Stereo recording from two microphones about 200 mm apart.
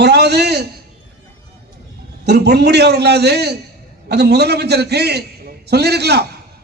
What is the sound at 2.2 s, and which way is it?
A man's voice, 55° right (ahead or behind).